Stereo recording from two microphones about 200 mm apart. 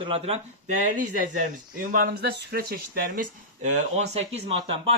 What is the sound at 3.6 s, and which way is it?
Speech, 35° right (ahead or behind).